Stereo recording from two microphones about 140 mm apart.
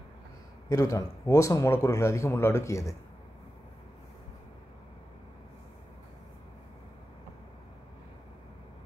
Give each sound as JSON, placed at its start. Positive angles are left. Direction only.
{"t": 0.7, "sound": "a man's voice", "side_deg": 25}